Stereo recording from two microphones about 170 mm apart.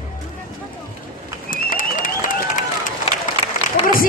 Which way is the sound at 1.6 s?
50° left (ahead or behind).